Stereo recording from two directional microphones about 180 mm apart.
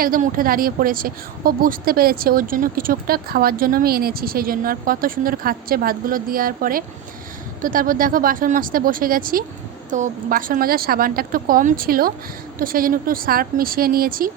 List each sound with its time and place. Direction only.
0.0 s a woman's voice: 50° right (ahead or behind)